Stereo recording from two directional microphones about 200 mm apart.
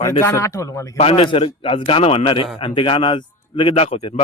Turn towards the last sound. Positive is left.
turn(degrees=30)  # may be behind; listen again after turning